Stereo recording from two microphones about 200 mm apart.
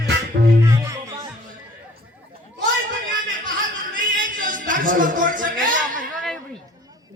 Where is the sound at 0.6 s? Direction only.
15° right (ahead or behind).